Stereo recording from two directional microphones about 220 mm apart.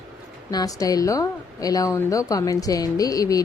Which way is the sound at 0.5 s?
15° left (ahead or behind).